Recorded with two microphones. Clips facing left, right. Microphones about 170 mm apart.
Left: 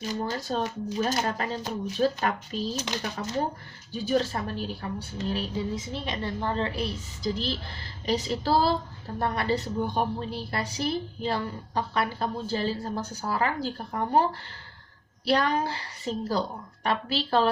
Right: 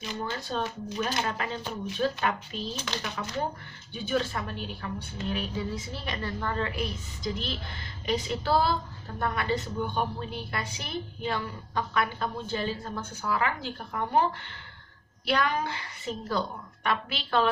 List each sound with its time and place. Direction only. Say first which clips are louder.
0.0 s a woman's voice: left 4 dB; 40° left (ahead or behind)